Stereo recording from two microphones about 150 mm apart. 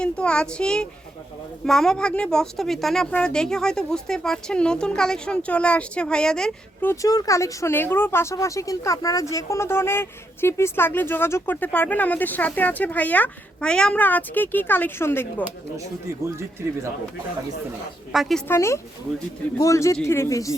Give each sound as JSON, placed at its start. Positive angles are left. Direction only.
{"t": 0.0, "sound": "speech", "side_deg": 5}
{"t": 6.9, "sound": "speech", "side_deg": 25}
{"t": 15.8, "sound": "speech", "side_deg": -20}
{"t": 18.1, "sound": "speech", "side_deg": 0}
{"t": 18.4, "sound": "speech", "side_deg": 15}